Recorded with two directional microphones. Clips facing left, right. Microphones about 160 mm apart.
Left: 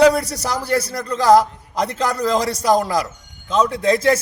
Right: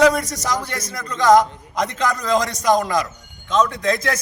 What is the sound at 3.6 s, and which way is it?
Speech, 30° left (ahead or behind).